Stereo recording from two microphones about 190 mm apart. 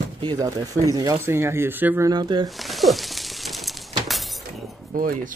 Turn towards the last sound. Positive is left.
turn(degrees=-45)  # may be behind; listen again after turning